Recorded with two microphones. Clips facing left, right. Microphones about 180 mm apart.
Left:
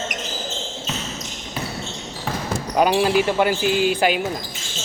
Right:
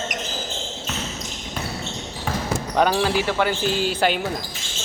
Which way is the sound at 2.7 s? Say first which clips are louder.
Left 3 dB; 10° left (ahead or behind).